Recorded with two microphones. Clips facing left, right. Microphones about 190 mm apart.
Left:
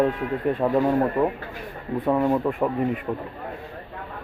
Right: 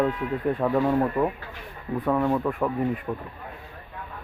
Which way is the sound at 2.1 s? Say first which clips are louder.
Left 2 dB; 15° left (ahead or behind).